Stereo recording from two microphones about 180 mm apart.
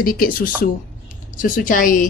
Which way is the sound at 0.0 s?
55° left (ahead or behind).